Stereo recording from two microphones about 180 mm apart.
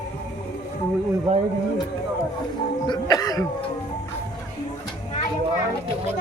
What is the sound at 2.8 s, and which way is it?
Cough, 20° left (ahead or behind).